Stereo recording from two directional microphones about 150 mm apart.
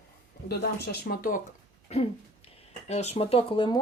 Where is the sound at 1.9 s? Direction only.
40° left (ahead or behind).